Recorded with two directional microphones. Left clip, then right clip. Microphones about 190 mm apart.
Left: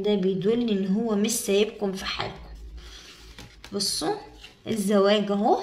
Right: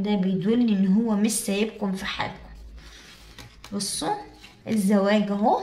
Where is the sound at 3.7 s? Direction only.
30° left (ahead or behind).